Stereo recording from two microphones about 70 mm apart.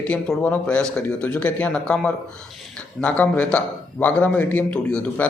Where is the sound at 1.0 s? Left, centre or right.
Left.